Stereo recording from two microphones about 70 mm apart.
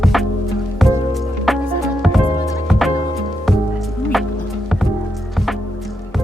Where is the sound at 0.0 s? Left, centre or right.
Centre.